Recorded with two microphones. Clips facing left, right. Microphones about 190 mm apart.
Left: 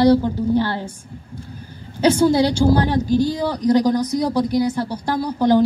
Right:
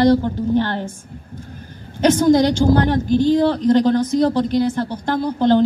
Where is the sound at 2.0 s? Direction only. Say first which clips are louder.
Right 2 dB; 10° left (ahead or behind).